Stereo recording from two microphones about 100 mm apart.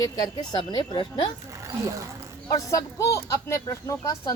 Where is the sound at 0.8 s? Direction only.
55° left (ahead or behind).